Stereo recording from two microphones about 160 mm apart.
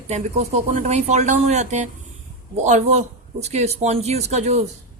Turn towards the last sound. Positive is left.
turn(degrees=-45)  # may be behind; listen again after turning